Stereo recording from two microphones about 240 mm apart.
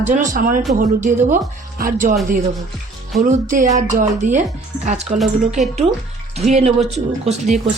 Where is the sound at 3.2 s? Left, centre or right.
Right.